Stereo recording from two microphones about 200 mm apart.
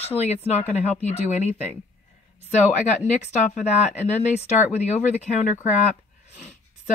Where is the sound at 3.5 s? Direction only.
35° left (ahead or behind).